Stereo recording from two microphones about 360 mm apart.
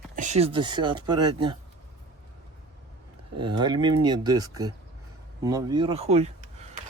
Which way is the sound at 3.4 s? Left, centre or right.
Centre.